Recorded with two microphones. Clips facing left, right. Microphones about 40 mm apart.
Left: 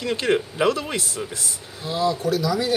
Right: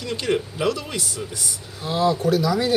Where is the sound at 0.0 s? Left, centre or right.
Centre.